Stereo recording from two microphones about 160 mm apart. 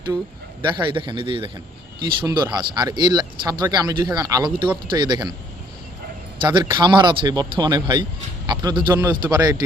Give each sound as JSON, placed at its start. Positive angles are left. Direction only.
{"t": 0.6, "sound": "a man's voice", "side_deg": -30}
{"t": 6.4, "sound": "a man's voice", "side_deg": -30}